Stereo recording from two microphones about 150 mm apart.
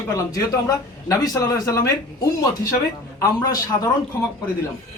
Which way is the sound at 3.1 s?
25° left (ahead or behind).